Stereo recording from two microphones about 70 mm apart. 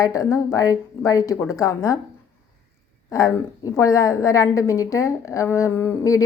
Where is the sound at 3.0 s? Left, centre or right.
Left.